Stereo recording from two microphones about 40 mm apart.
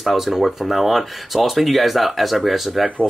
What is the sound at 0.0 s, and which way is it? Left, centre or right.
Speech, centre.